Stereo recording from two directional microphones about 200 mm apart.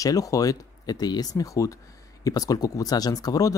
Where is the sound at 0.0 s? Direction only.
15° left (ahead or behind).